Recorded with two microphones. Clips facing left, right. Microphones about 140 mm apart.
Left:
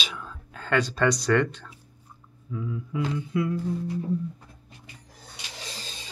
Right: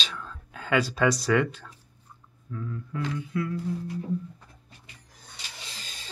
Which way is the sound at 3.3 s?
20° left (ahead or behind).